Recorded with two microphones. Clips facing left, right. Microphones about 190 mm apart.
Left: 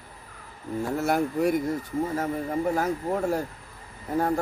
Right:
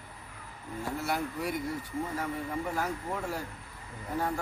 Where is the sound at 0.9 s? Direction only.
50° left (ahead or behind).